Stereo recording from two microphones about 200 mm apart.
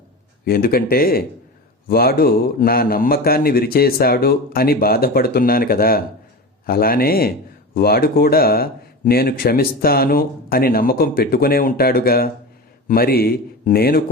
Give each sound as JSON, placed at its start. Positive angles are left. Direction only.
{"t": 0.4, "sound": "speech", "side_deg": 50}